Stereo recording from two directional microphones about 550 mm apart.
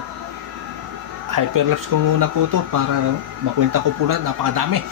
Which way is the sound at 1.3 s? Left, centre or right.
Right.